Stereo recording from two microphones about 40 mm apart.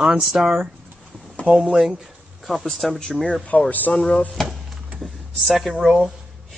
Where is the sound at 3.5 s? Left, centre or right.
Left.